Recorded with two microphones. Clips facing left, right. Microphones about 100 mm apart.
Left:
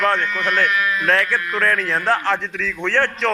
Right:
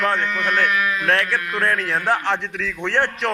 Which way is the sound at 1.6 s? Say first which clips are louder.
Left 1 dB; 20° right (ahead or behind).